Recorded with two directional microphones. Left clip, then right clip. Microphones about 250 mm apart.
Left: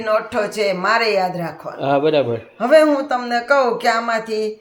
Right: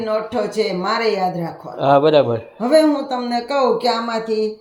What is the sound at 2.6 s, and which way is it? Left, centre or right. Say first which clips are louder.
A man's voice: left 2 dB; left.